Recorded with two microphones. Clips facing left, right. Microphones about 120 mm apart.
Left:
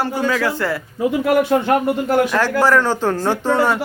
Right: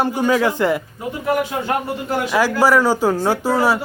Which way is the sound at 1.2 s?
65° left (ahead or behind).